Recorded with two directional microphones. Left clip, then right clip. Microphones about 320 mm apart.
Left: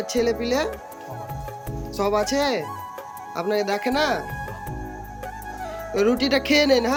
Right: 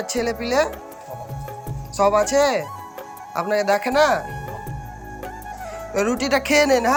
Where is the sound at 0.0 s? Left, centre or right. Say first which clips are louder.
Left 1 dB; centre.